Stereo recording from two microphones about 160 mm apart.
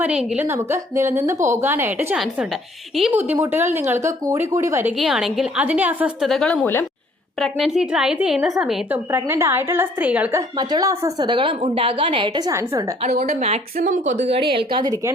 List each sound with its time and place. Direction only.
0.0 s a woman's voice: 10° right (ahead or behind)
2.9 s a woman's voice: centre (ahead or behind)
3.2 s a woman's voice: 15° right (ahead or behind)
4.9 s a woman's voice: centre (ahead or behind)
6.2 s a woman's voice: 5° left (ahead or behind)
9.1 s a woman's voice: 15° right (ahead or behind)
10.6 s a woman's voice: 25° right (ahead or behind)
12.7 s a woman's voice: 45° right (ahead or behind)
13.7 s a woman's voice: 55° right (ahead or behind); by 14.9 s 30° right (ahead or behind)